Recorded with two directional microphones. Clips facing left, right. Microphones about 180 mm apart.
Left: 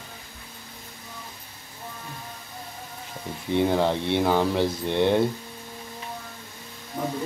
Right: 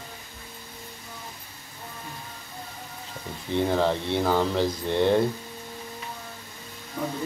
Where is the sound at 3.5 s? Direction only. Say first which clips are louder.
Left 1 dB; 15° left (ahead or behind).